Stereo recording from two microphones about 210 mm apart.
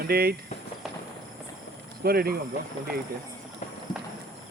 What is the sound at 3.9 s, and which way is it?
Clip-clop, 20° left (ahead or behind).